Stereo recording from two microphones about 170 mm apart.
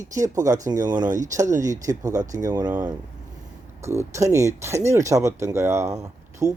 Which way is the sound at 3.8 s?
15° right (ahead or behind).